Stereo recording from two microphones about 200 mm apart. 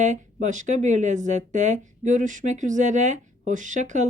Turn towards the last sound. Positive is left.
turn(degrees=-35)  # may be behind; listen again after turning